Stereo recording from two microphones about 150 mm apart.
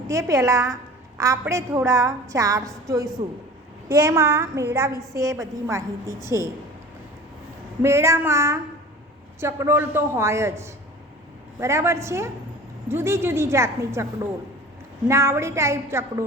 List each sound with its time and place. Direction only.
0.1 s a woman's voice: 20° right (ahead or behind)
7.8 s a man's voice: 20° right (ahead or behind)